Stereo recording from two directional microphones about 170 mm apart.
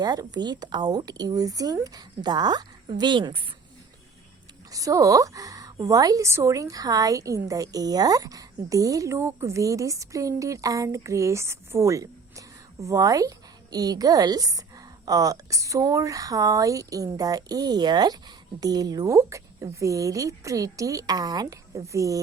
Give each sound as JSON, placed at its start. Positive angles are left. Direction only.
{"t": 0.0, "sound": "a woman's voice", "side_deg": -25}
{"t": 4.7, "sound": "a woman's voice", "side_deg": -20}